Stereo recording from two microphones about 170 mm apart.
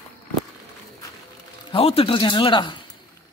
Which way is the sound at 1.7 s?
35° left (ahead or behind).